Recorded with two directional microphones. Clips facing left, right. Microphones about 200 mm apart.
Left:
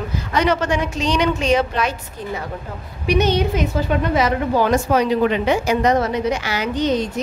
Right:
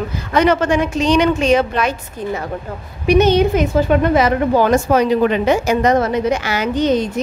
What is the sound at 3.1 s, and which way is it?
A woman's voice, 50° right (ahead or behind).